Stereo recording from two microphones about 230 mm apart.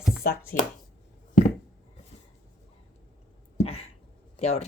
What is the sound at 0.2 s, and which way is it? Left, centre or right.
Speech, left.